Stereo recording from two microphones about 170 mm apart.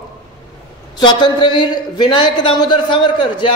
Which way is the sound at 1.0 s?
25° left (ahead or behind).